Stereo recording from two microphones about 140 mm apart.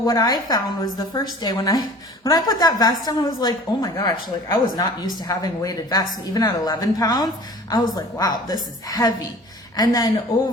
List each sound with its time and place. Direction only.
0.0 s a woman's voice: 30° left (ahead or behind)